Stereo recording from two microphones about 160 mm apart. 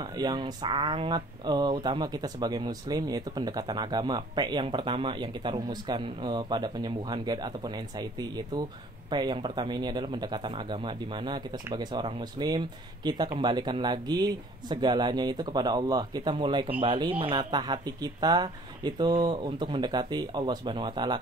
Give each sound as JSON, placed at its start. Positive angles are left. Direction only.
{"t": 0.0, "sound": "speech", "side_deg": -25}